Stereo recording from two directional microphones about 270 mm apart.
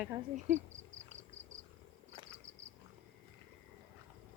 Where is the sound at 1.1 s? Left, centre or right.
Right.